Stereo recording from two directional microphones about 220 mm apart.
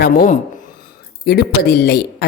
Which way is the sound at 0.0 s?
40° left (ahead or behind).